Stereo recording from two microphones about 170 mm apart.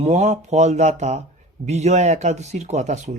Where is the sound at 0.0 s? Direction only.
40° right (ahead or behind).